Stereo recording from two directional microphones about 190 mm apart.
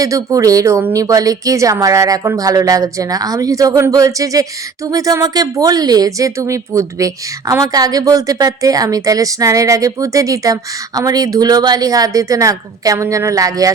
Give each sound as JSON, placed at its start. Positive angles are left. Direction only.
{"t": 0.0, "sound": "speech", "side_deg": -15}